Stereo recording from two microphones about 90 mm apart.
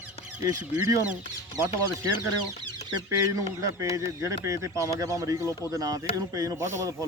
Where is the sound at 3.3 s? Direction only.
35° right (ahead or behind).